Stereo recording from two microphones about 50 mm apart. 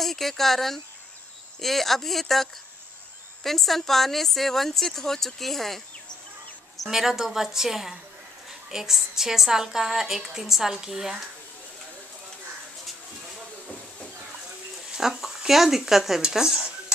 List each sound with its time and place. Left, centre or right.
0.0 s speech: centre
6.9 s a woman's voice: centre
14.9 s a woman's voice: centre